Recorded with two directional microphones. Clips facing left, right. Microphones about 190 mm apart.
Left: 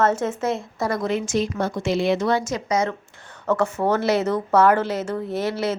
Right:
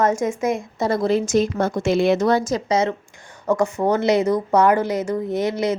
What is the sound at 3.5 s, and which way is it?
A woman's voice, 10° right (ahead or behind).